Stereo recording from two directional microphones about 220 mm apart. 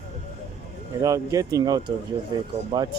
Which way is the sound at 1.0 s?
15° right (ahead or behind).